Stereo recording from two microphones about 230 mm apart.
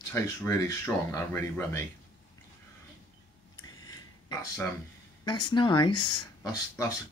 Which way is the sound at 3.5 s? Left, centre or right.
Centre.